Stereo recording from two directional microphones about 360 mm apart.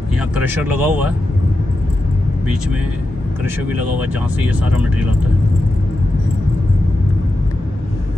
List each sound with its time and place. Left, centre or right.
0.4 s speech: centre
3.4 s speech: centre